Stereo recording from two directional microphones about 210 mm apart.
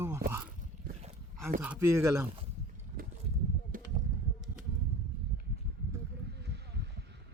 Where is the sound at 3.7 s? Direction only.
40° right (ahead or behind).